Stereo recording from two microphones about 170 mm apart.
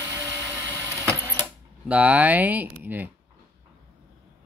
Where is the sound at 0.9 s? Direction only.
15° right (ahead or behind).